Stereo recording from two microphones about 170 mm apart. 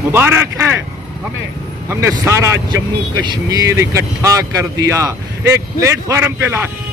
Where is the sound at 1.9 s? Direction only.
15° right (ahead or behind).